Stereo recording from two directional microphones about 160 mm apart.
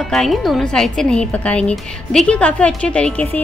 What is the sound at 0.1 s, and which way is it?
A woman's voice, centre (ahead or behind).